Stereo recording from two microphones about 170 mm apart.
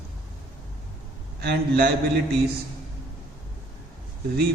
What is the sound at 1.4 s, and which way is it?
Speech, 65° right (ahead or behind).